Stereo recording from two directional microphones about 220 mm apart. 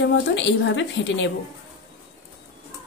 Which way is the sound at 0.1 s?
55° left (ahead or behind).